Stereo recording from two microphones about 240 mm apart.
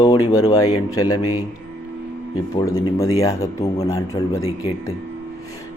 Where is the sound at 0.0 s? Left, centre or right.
Left.